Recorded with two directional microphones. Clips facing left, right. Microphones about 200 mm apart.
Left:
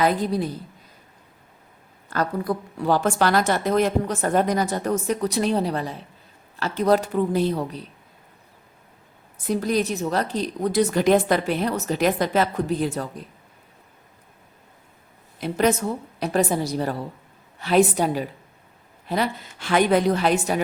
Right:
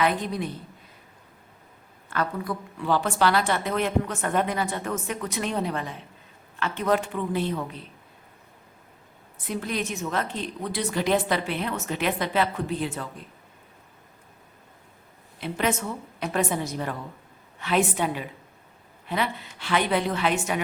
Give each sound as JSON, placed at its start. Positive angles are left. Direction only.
{"t": 0.0, "sound": "a woman's voice", "side_deg": 35}
{"t": 2.0, "sound": "a woman's voice", "side_deg": 40}
{"t": 9.5, "sound": "a woman's voice", "side_deg": 40}
{"t": 15.4, "sound": "a woman's voice", "side_deg": 40}